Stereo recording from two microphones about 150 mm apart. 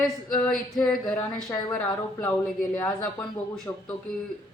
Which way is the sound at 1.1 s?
25° left (ahead or behind).